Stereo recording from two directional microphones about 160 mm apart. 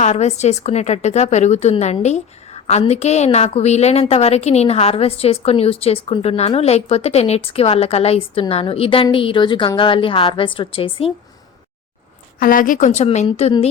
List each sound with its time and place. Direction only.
0.0 s a woman's voice: 45° left (ahead or behind)
12.4 s a woman's voice: 60° left (ahead or behind)
13.2 s a woman's voice: 35° left (ahead or behind)